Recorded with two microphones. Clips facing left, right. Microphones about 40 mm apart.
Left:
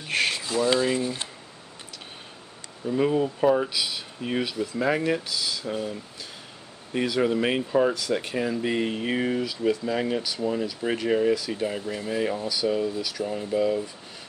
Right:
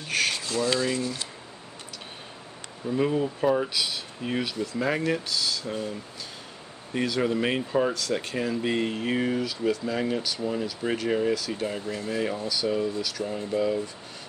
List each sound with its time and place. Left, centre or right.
0.0 s speech: centre
2.9 s speech: centre